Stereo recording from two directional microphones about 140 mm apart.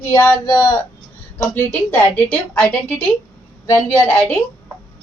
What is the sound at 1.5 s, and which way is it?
A woman's voice, 15° left (ahead or behind).